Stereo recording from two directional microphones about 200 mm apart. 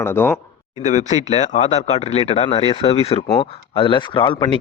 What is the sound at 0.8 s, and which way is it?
A man's voice, 35° left (ahead or behind).